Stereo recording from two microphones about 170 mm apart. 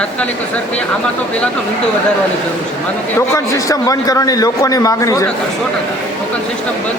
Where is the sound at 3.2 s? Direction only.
20° left (ahead or behind).